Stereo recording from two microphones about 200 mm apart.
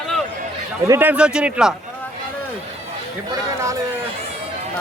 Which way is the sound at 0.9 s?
10° right (ahead or behind).